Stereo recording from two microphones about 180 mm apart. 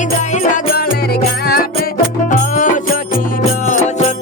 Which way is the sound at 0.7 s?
60° left (ahead or behind).